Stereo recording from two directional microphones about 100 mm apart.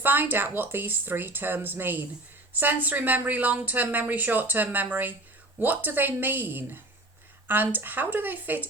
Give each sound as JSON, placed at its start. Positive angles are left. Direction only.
{"t": 0.0, "sound": "a woman's voice", "side_deg": -20}